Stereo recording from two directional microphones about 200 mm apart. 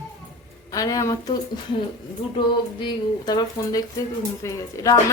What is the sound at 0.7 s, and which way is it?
Speech, 15° left (ahead or behind).